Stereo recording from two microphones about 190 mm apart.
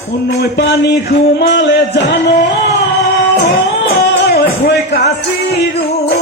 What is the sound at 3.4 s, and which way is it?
Music, 55° left (ahead or behind).